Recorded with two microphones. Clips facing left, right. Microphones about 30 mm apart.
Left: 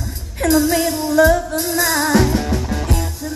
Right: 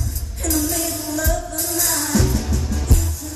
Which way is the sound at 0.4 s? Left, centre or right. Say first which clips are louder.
Left 8 dB; left.